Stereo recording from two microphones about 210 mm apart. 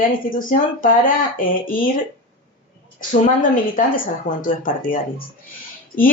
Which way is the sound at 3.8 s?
40° left (ahead or behind).